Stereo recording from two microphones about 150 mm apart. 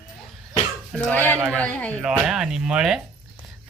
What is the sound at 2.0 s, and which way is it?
Speech, 5° right (ahead or behind).